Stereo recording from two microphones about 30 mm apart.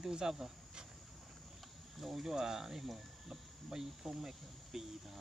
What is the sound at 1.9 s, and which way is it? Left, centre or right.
Speech, centre.